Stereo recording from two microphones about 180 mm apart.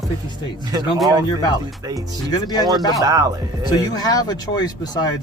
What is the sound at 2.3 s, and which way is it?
Speech, 20° left (ahead or behind).